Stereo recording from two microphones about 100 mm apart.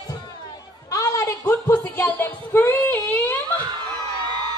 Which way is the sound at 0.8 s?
30° left (ahead or behind).